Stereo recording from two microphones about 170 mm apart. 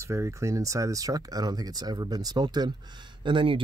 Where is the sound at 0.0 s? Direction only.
15° right (ahead or behind).